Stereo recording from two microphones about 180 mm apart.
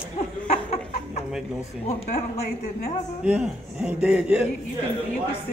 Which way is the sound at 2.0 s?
40° left (ahead or behind).